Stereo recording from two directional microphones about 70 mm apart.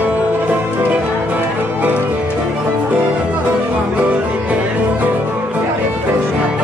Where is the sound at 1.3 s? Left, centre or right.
Right.